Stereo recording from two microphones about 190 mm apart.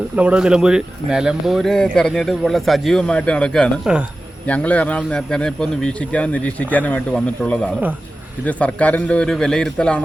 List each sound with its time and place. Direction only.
0.2 s speech: 5° right (ahead or behind)